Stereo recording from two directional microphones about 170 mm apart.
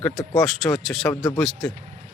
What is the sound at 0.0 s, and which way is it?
A man's voice, centre (ahead or behind).